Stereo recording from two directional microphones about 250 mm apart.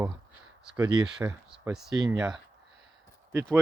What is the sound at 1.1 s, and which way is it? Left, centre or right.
Speech, centre.